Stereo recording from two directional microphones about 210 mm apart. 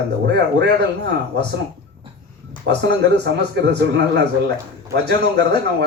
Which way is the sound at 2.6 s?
55° right (ahead or behind).